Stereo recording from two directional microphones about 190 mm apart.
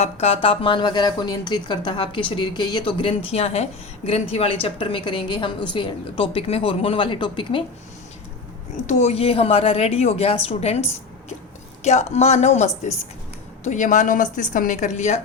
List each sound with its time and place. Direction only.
0.0 s a woman's voice: 30° left (ahead or behind)
8.9 s a woman's voice: 35° left (ahead or behind)